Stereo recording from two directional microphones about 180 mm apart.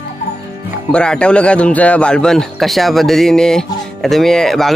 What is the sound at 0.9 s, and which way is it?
A man's voice, 5° left (ahead or behind).